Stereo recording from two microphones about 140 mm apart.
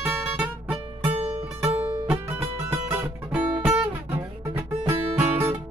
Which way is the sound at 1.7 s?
10° right (ahead or behind).